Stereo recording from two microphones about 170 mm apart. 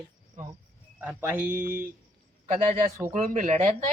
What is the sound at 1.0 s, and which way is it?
Speech, 10° right (ahead or behind).